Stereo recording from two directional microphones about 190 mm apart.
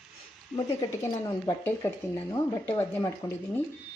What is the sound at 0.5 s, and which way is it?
Speech, 15° left (ahead or behind).